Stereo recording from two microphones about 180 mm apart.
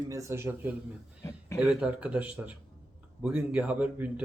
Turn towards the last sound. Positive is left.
turn(degrees=-5)  # may be behind; listen again after turning